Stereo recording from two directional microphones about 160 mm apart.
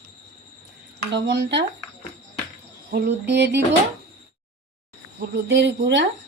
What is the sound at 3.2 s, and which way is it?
Speech, 90° right.